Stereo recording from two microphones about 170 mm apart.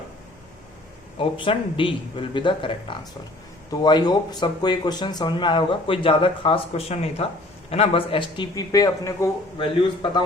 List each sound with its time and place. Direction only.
1.2 s speech: 30° left (ahead or behind)